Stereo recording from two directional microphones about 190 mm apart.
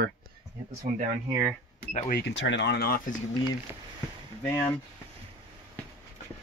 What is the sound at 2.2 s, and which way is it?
Speech, 70° left (ahead or behind).